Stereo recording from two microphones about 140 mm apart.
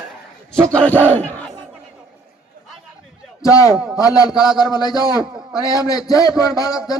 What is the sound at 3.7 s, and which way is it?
Speech, 5° right (ahead or behind).